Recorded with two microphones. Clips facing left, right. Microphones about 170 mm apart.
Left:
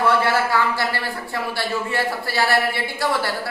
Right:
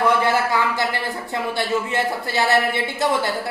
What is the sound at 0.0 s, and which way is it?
A man's voice, 20° right (ahead or behind).